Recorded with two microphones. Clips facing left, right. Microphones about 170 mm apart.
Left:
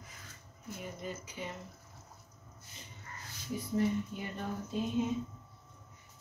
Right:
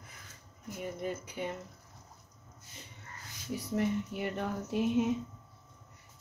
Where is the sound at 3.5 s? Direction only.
70° right (ahead or behind).